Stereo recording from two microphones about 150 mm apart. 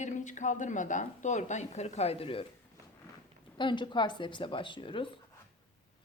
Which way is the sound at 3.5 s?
30° left (ahead or behind).